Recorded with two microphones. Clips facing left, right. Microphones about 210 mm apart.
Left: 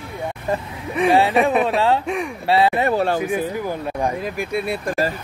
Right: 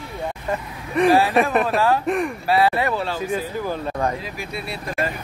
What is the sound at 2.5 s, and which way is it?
Speech, 25° left (ahead or behind).